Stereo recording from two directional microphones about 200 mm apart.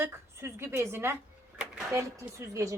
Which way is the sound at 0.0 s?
15° right (ahead or behind).